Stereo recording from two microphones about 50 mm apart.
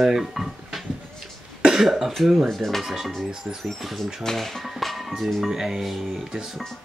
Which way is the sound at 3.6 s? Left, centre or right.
Centre.